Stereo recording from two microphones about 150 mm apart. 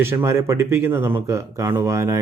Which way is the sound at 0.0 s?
15° right (ahead or behind).